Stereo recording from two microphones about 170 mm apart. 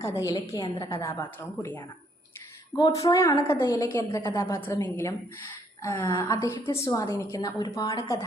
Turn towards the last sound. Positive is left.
turn(degrees=20)  # may be behind; listen again after turning